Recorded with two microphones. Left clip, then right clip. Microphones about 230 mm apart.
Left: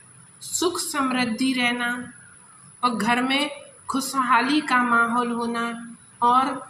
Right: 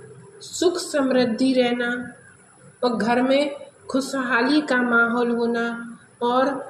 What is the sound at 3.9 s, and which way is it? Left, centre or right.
A woman's voice, left.